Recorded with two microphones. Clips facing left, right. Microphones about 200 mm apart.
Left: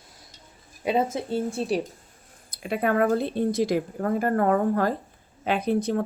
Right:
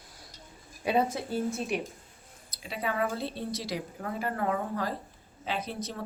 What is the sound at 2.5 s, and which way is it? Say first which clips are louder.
A woman's voice: left 9 dB; 55° left (ahead or behind).